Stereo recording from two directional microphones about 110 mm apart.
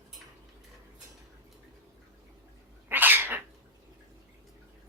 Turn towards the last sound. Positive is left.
turn(degrees=-20)  # may be behind; listen again after turning